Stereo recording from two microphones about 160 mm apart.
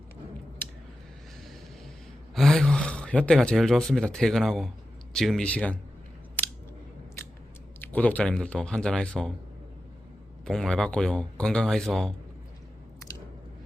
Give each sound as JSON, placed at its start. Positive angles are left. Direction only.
{"t": 0.6, "sound": "a sound", "side_deg": 15}
{"t": 2.3, "sound": "speech", "side_deg": 0}
{"t": 6.4, "sound": "scissors", "side_deg": 10}
{"t": 7.8, "sound": "speech", "side_deg": 10}
{"t": 10.4, "sound": "speech", "side_deg": 5}